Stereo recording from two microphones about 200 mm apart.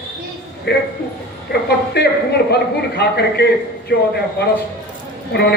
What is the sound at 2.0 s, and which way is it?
Speech, 55° left (ahead or behind).